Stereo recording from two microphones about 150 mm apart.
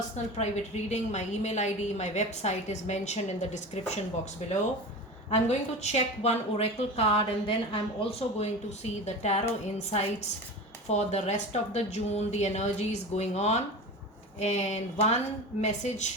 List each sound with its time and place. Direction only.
0.3 s a woman's voice: 50° left (ahead or behind)
5.3 s a woman's voice: 50° left (ahead or behind)